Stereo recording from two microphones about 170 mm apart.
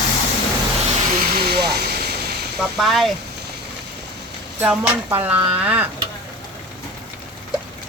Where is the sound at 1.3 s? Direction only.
65° right (ahead or behind).